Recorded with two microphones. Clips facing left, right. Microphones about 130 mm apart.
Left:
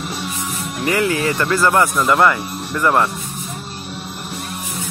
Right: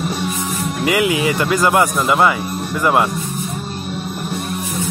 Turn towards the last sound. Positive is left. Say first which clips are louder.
# right 1 dB
turn(degrees=-15)  # may be behind; listen again after turning